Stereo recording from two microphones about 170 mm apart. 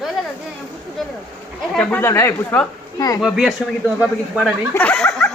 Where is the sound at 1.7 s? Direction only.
5° left (ahead or behind).